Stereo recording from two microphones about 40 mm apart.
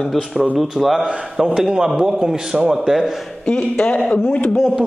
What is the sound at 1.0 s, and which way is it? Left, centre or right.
A man's voice, right.